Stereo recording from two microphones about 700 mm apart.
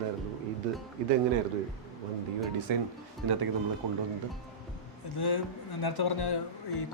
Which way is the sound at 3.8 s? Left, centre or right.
Right.